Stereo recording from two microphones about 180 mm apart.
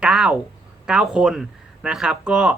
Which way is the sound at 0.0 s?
5° right (ahead or behind).